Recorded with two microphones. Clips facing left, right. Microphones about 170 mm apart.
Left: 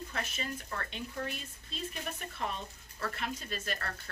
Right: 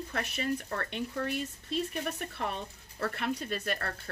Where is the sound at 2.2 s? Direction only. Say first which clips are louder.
Right 3 dB; 55° right (ahead or behind).